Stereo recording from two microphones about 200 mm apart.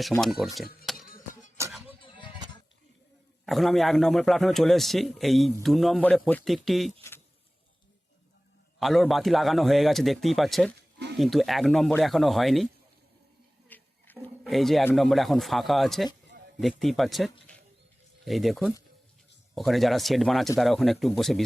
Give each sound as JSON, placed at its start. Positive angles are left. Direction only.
{"t": 0.1, "sound": "speech", "side_deg": 0}
{"t": 1.0, "sound": "music", "side_deg": 45}
{"t": 1.9, "sound": "music", "side_deg": 25}
{"t": 3.4, "sound": "speech", "side_deg": 0}
{"t": 8.8, "sound": "speech", "side_deg": 0}
{"t": 13.7, "sound": "a sound", "side_deg": 10}
{"t": 14.4, "sound": "a man's voice", "side_deg": 0}